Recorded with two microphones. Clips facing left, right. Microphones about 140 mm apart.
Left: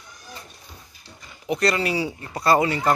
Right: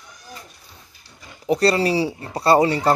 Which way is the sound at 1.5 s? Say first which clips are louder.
Right 5 dB; 35° right (ahead or behind).